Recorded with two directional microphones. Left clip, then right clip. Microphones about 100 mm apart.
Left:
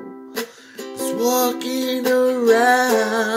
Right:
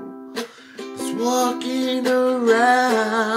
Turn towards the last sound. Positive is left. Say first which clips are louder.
# left 1 dB
turn(degrees=-5)  # may be behind; listen again after turning